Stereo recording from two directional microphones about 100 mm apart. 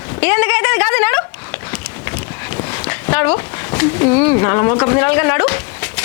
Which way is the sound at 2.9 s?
25° left (ahead or behind).